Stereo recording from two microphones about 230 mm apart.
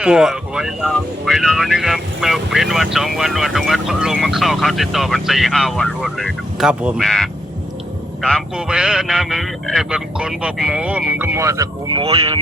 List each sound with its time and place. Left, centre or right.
0.0 s speech: centre; by 12.4 s right